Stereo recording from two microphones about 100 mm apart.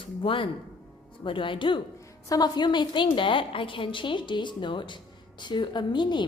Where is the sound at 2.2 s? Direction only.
40° left (ahead or behind).